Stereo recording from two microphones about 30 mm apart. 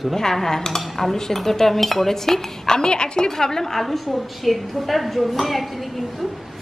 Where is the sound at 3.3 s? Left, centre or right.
Centre.